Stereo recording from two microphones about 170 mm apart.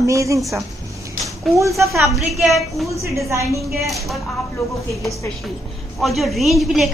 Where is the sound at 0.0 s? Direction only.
20° right (ahead or behind).